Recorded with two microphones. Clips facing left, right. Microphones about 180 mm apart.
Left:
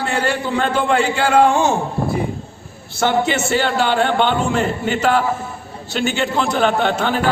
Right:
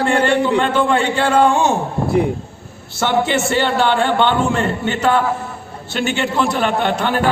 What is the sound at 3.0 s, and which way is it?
Speech, centre (ahead or behind).